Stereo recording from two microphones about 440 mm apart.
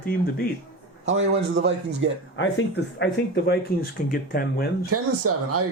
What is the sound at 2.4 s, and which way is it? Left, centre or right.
Speech, left.